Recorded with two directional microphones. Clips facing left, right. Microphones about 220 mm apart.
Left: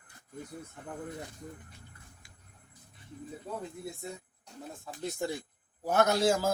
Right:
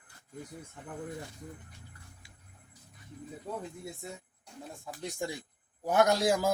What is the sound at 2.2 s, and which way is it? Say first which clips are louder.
Music: right 1 dB; 50° left (ahead or behind).